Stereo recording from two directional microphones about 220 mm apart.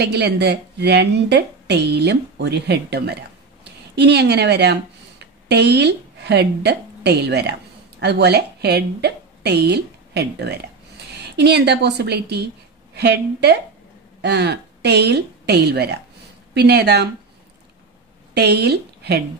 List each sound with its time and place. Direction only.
0.0 s a woman's voice: 50° right (ahead or behind)
18.3 s a woman's voice: 50° right (ahead or behind)